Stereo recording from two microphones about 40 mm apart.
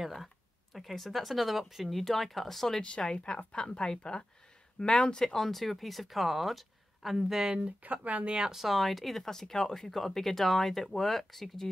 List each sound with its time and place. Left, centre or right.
0.0 s speech: centre
2.8 s speech: left; by 7.4 s centre
7.6 s speech: right
8.5 s speech: centre